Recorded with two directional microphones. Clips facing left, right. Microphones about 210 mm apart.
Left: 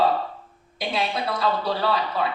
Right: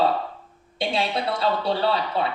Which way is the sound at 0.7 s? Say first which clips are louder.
Right 2 dB; 25° right (ahead or behind).